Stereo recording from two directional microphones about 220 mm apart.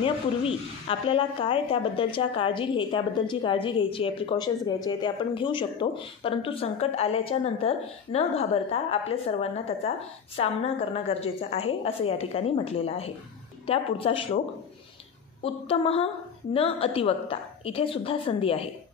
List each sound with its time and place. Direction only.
0.0 s a woman's voice: 25° left (ahead or behind)
15.4 s a woman's voice: 25° left (ahead or behind)